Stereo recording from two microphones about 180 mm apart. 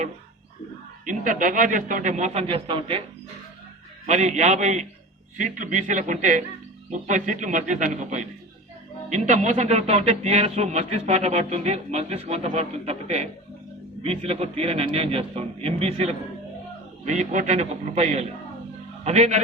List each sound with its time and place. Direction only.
1.0 s a man's voice: 45° right (ahead or behind); by 3.0 s 30° right (ahead or behind)
4.0 s a man's voice: 40° right (ahead or behind)